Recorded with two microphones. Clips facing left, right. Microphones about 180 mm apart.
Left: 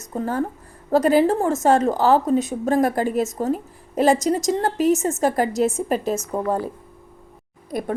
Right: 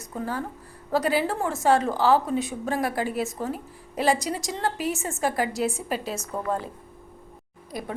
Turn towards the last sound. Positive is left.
turn(degrees=50)  # may be behind; listen again after turning